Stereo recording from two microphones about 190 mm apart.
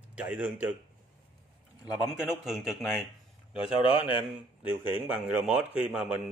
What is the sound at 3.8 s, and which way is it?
Speech, 30° left (ahead or behind).